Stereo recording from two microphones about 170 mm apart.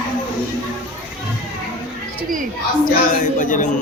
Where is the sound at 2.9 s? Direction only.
50° left (ahead or behind).